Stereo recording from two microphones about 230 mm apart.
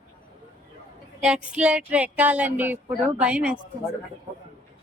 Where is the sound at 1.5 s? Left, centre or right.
Centre.